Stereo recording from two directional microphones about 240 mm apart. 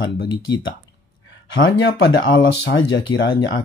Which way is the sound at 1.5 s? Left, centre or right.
Left.